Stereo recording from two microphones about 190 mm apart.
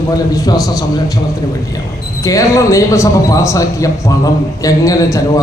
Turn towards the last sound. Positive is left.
turn(degrees=15)  # may be behind; listen again after turning